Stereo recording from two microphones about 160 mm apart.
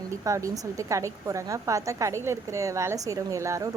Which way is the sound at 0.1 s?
20° right (ahead or behind).